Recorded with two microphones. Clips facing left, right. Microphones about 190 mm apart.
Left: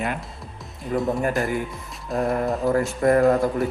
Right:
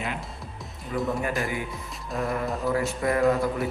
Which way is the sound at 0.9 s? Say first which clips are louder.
Left 5 dB; 45° left (ahead or behind).